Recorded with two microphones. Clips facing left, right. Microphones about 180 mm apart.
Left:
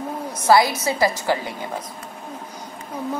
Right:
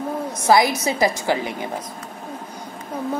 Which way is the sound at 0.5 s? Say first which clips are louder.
Even; 20° right (ahead or behind).